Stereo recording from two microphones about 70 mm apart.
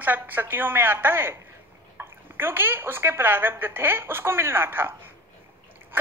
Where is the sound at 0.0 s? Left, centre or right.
Right.